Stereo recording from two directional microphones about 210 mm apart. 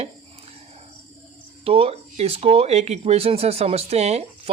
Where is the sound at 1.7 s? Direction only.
30° right (ahead or behind).